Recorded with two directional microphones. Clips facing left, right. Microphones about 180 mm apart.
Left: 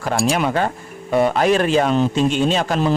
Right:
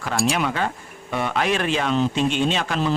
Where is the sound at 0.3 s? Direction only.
45° left (ahead or behind).